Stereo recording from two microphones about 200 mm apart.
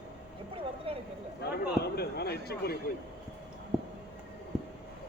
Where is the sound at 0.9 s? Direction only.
30° right (ahead or behind).